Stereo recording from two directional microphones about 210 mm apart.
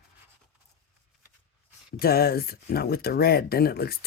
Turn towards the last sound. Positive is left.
turn(degrees=45)  # may be behind; listen again after turning